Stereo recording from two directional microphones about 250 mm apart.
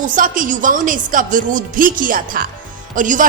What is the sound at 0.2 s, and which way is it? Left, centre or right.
A woman's voice, right.